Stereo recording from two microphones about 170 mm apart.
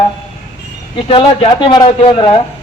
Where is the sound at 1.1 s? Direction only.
30° left (ahead or behind).